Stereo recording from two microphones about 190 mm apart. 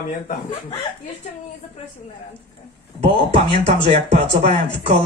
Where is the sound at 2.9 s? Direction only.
35° right (ahead or behind).